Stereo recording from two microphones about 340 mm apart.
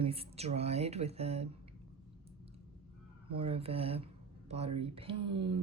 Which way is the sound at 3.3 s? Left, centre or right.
Centre.